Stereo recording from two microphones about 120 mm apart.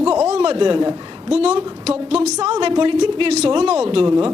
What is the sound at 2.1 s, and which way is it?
Speech, 65° right (ahead or behind).